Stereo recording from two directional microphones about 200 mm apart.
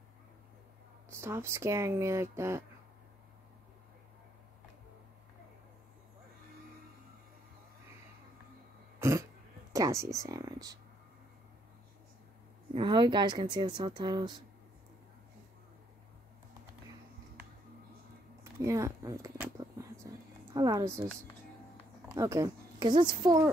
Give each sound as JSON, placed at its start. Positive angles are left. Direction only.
{"t": 1.1, "sound": "speech", "side_deg": -15}
{"t": 9.7, "sound": "speech", "side_deg": -15}
{"t": 12.7, "sound": "speech", "side_deg": -25}
{"t": 18.4, "sound": "a sound", "side_deg": -15}
{"t": 20.5, "sound": "speech", "side_deg": -20}